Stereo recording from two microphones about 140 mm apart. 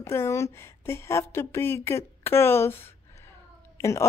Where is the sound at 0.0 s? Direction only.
20° left (ahead or behind).